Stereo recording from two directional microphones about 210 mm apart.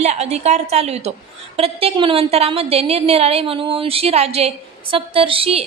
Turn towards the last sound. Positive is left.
turn(degrees=-25)  # may be behind; listen again after turning